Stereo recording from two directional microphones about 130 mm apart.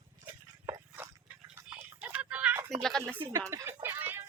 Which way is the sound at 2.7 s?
5° left (ahead or behind).